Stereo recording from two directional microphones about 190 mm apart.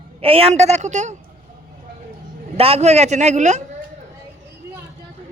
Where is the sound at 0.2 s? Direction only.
30° right (ahead or behind).